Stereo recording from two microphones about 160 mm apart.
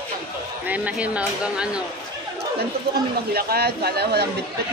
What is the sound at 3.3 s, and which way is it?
Speech, 75° right (ahead or behind).